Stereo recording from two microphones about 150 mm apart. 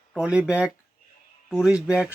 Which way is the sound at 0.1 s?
5° right (ahead or behind).